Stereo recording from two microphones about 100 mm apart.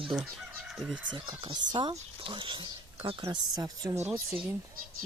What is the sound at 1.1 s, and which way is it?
Speech, 50° right (ahead or behind).